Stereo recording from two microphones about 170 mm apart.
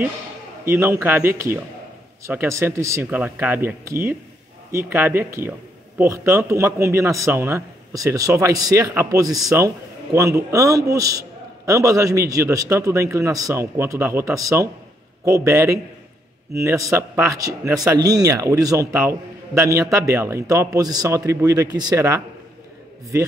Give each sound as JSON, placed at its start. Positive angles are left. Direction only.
{"t": 0.7, "sound": "a man's voice", "side_deg": -15}